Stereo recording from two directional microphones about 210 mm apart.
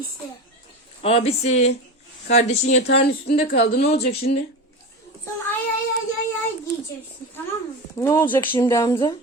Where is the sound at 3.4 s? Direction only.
45° left (ahead or behind).